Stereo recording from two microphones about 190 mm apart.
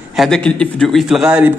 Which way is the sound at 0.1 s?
Centre (ahead or behind).